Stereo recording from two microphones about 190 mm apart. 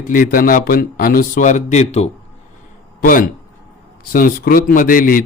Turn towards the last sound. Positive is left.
turn(degrees=45)  # may be behind; listen again after turning